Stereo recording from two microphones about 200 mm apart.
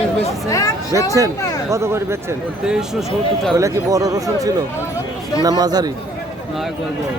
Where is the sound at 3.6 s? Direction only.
15° right (ahead or behind).